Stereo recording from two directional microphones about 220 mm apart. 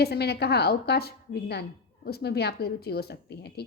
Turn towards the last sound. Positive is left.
turn(degrees=50)  # may be behind; listen again after turning